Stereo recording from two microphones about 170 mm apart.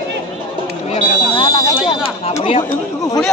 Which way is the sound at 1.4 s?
20° left (ahead or behind).